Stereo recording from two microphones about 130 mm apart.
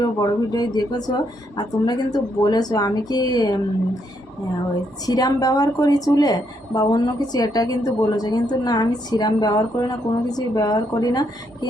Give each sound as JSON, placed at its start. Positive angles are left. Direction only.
{"t": 0.0, "sound": "speech", "side_deg": 30}
{"t": 5.0, "sound": "a woman's voice", "side_deg": 30}